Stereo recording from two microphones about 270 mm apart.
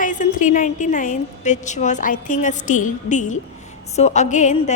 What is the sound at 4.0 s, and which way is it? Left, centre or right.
Speech, left.